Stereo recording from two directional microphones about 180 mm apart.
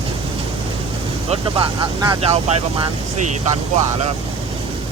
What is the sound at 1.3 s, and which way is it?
Speech, 30° right (ahead or behind).